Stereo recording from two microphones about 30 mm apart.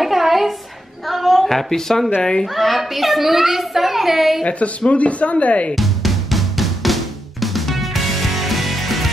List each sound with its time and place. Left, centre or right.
0.0 s a sound: centre
1.7 s speech: centre
2.5 s a child's voice: centre
4.5 s speech: left
5.8 s drum kit: centre
7.5 s music: centre